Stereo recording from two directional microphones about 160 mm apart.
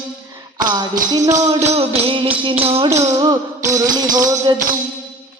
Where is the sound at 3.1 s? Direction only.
20° right (ahead or behind).